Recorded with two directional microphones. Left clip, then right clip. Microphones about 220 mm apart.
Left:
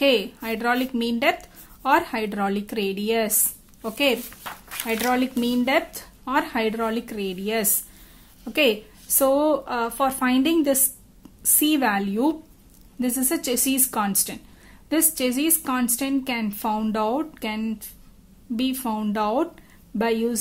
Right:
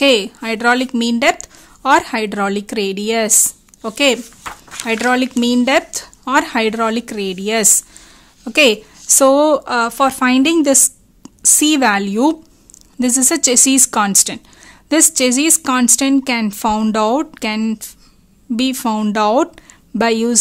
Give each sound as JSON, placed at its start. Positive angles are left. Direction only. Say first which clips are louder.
{"t": 0.0, "sound": "speech", "louder": "right 7 dB", "side_deg": -40}